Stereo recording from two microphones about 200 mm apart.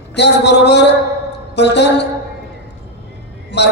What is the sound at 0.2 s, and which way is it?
Speech, 60° left (ahead or behind).